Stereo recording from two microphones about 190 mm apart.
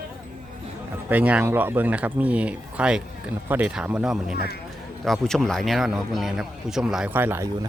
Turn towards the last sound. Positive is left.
turn(degrees=-10)  # may be behind; listen again after turning